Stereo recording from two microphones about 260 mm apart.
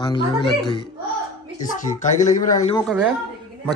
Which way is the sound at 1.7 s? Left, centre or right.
Left.